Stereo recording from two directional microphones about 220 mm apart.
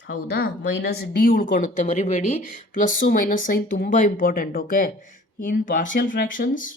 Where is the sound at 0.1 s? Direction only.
45° left (ahead or behind).